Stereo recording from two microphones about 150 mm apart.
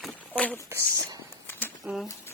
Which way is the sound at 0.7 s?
20° right (ahead or behind).